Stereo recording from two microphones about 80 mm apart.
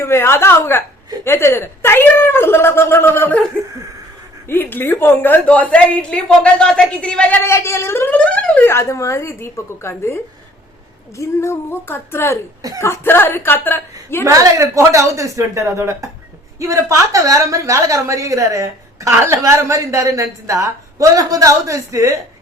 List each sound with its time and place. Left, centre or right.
0.0 s a woman's voice: left
4.4 s speech: left
5.5 s speech: centre
7.4 s a woman's voice: left
8.1 s a sound: centre
8.6 s a woman's voice: left
11.2 s a woman's voice: left
14.3 s a woman's voice: right